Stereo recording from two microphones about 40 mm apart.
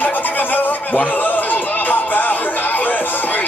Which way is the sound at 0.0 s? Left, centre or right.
Left.